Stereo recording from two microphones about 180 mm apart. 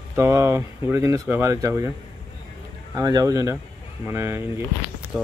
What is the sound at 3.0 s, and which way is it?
Speech, 20° right (ahead or behind).